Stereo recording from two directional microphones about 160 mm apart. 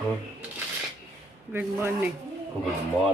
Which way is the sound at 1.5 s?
15° right (ahead or behind).